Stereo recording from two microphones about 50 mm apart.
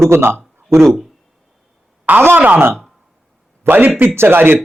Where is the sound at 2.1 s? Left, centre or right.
Right.